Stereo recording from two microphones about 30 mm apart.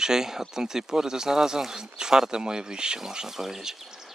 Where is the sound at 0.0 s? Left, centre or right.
Centre.